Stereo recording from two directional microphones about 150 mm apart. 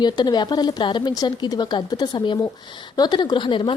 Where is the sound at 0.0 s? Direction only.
30° left (ahead or behind).